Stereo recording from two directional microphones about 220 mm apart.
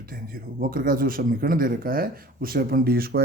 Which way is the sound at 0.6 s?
40° right (ahead or behind).